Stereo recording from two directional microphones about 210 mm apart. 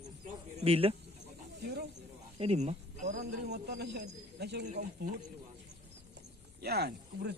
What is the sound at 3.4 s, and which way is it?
A man's voice, 50° right (ahead or behind).